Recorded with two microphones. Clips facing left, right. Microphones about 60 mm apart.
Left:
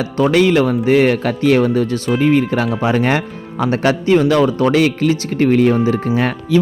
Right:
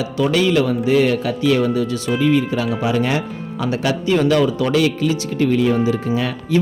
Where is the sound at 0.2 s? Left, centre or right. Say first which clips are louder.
Left 4 dB; left.